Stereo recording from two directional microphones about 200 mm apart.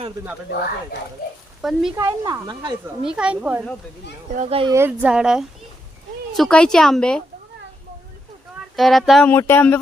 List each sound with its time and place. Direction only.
1.6 s speech: centre (ahead or behind)
2.0 s speech: 15° right (ahead or behind)
3.0 s speech: 5° right (ahead or behind)
4.4 s speech: 30° right (ahead or behind)
4.7 s speech: 10° right (ahead or behind); by 7.2 s 5° left (ahead or behind)
8.7 s speech: centre (ahead or behind)
9.3 s speech: 10° left (ahead or behind)